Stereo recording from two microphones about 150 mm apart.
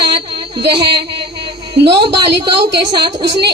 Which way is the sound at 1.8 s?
30° right (ahead or behind).